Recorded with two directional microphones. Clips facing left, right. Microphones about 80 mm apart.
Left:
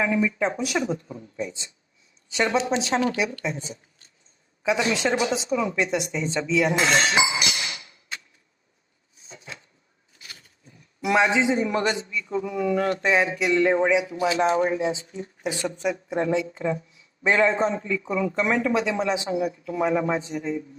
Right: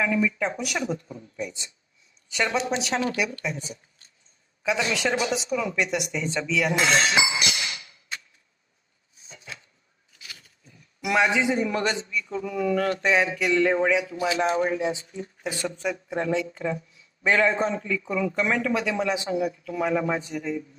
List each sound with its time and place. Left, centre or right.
0.0 s speech: left
9.3 s a sound: left
10.1 s a man's voice: left